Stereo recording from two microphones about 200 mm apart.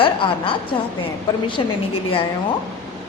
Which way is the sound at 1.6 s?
25° left (ahead or behind).